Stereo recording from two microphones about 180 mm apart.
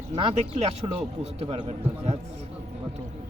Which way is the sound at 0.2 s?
35° right (ahead or behind).